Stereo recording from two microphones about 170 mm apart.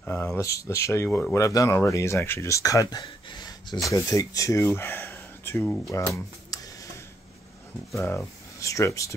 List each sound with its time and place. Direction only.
0.0 s speech: 10° left (ahead or behind)
5.9 s speech: 15° left (ahead or behind)
7.9 s speech: 15° left (ahead or behind)